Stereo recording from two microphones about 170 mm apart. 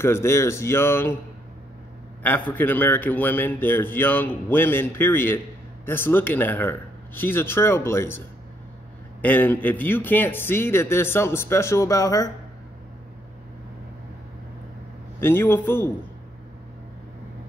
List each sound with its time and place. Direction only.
0.0 s a man's voice: 15° left (ahead or behind)
2.2 s a man's voice: 10° left (ahead or behind)
9.2 s a man's voice: 10° left (ahead or behind)
15.1 s a man's voice: 15° left (ahead or behind)